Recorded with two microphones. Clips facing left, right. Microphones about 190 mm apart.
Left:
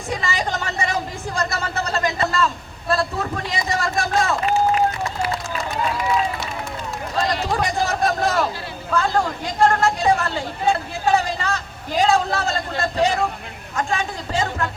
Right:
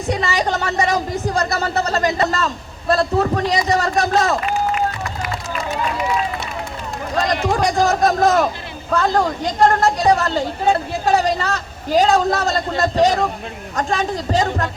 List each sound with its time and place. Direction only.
0.1 s a sound: 40° right (ahead or behind)
2.9 s speech: 40° right (ahead or behind)
7.6 s speech: 40° right (ahead or behind)